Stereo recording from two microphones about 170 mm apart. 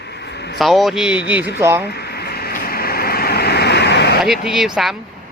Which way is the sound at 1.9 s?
70° left (ahead or behind).